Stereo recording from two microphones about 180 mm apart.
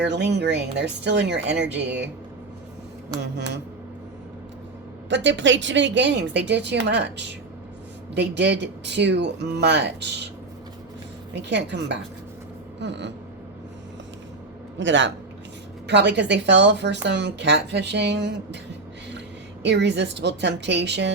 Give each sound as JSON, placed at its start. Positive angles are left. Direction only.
{"t": 0.0, "sound": "speech", "side_deg": -70}
{"t": 3.2, "sound": "speech", "side_deg": -70}
{"t": 5.0, "sound": "a woman's voice", "side_deg": -80}
{"t": 11.3, "sound": "speech", "side_deg": -75}
{"t": 14.8, "sound": "a man's voice", "side_deg": -90}
{"t": 15.9, "sound": "speech", "side_deg": -75}
{"t": 19.6, "sound": "speech", "side_deg": -75}